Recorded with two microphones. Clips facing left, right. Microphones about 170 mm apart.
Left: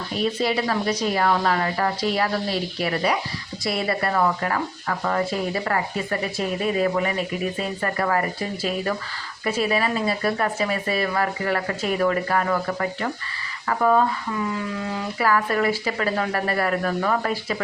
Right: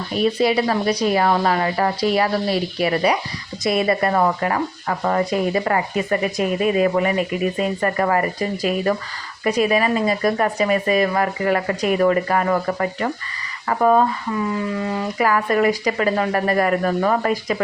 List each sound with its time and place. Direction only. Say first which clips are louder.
0.2 s speech: right 5 dB; 15° right (ahead or behind)
15.2 s speech: right 3 dB; 15° right (ahead or behind)